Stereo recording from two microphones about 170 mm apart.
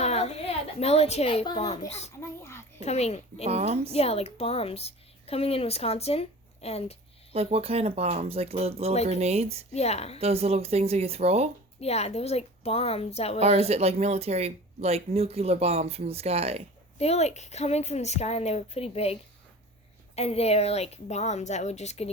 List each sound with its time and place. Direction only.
0.0 s a woman's voice: 40° left (ahead or behind)
2.2 s a sound: 15° left (ahead or behind)
2.8 s a woman's voice: 40° left (ahead or behind)
3.5 s speech: 40° right (ahead or behind)
3.9 s a woman's voice: 35° left (ahead or behind)
7.3 s speech: 35° right (ahead or behind)
9.7 s a woman's voice: 40° left (ahead or behind)
10.2 s speech: 35° right (ahead or behind)
11.8 s a woman's voice: 40° left (ahead or behind)
13.4 s speech: 35° right (ahead or behind)
17.0 s a woman's voice: 40° left (ahead or behind)
20.1 s a woman's voice: 35° left (ahead or behind)